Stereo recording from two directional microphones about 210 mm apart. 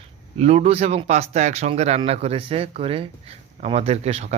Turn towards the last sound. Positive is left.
turn(degrees=-30)  # may be behind; listen again after turning